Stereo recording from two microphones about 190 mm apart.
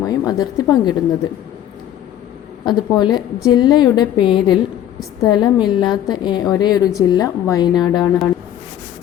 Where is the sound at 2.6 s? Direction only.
20° left (ahead or behind).